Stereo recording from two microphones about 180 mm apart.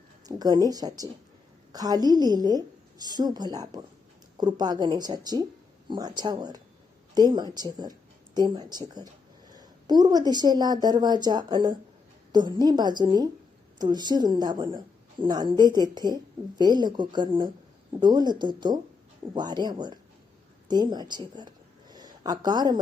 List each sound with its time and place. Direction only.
0.3 s a woman's voice: 20° right (ahead or behind)